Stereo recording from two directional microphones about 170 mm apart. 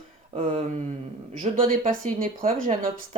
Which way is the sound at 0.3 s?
40° right (ahead or behind).